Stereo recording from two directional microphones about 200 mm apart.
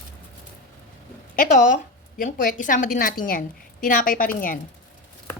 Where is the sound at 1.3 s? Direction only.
40° left (ahead or behind).